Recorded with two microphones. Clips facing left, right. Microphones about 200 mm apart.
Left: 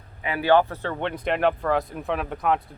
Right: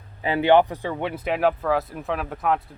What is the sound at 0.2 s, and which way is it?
Speech, 25° right (ahead or behind).